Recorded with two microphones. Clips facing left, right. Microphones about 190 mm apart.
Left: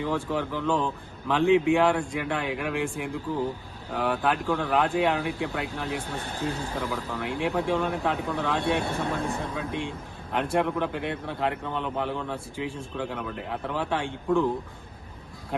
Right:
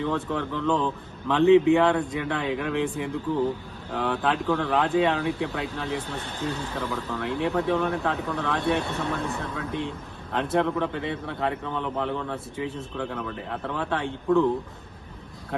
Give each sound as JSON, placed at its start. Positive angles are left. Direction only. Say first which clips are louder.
{"t": 0.0, "sound": "a man's voice", "louder": "right 1 dB", "side_deg": 5}
{"t": 6.5, "sound": "speech", "louder": "right 1 dB", "side_deg": 30}
{"t": 6.7, "sound": "speech", "louder": "right 1 dB", "side_deg": 5}
{"t": 9.0, "sound": "speech", "louder": "even", "side_deg": 30}
{"t": 10.3, "sound": "a man's voice", "louder": "right 1 dB", "side_deg": 10}